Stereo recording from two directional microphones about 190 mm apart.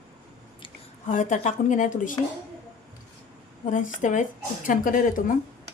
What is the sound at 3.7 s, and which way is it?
Speech, 40° left (ahead or behind).